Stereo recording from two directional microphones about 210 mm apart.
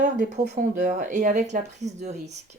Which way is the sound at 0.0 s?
35° right (ahead or behind).